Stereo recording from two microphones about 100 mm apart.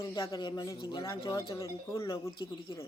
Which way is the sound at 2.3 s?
55° left (ahead or behind).